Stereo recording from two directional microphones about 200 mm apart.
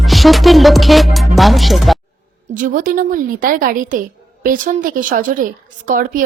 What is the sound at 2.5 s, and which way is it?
Speech, 40° right (ahead or behind).